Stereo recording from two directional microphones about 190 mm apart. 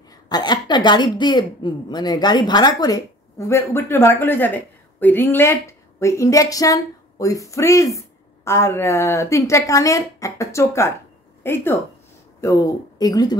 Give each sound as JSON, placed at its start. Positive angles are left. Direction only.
{"t": 0.1, "sound": "a woman's voice", "side_deg": 20}